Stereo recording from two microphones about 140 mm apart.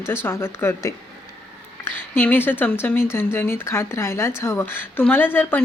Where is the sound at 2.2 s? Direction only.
15° left (ahead or behind).